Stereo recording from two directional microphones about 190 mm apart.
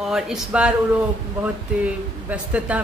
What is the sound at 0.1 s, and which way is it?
Speech, 5° right (ahead or behind).